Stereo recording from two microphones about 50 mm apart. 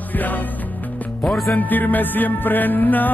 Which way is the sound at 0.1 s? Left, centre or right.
Left.